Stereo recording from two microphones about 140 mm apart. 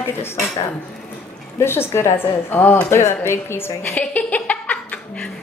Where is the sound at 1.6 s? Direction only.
15° left (ahead or behind).